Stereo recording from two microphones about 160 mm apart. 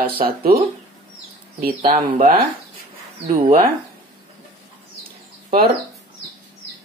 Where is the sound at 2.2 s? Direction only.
60° right (ahead or behind).